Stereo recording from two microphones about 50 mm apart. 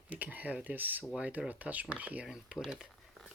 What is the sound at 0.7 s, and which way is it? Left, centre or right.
Speech, right.